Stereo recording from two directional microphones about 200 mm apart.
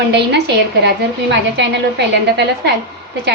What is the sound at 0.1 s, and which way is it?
A woman's voice, 60° right (ahead or behind).